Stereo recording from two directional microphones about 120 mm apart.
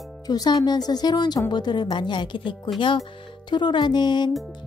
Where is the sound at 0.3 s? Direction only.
35° left (ahead or behind).